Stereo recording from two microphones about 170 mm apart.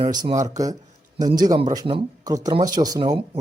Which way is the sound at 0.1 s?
25° right (ahead or behind).